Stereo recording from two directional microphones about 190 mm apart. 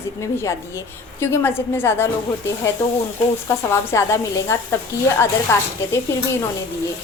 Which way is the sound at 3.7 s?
15° left (ahead or behind).